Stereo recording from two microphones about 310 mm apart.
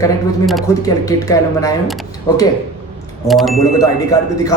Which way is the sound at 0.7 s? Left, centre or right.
Centre.